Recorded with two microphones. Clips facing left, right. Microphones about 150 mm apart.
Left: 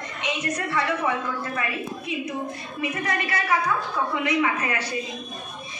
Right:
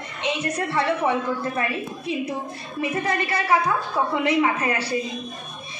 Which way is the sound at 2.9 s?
30° right (ahead or behind).